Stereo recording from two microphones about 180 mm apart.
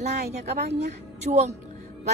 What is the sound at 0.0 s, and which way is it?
A woman's voice, 40° right (ahead or behind).